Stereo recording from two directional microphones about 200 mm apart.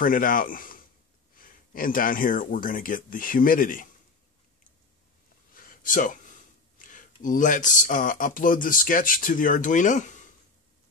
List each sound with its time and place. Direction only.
0.0 s speech: 45° left (ahead or behind)
5.5 s a sound: 45° left (ahead or behind)
6.8 s speech: 40° left (ahead or behind)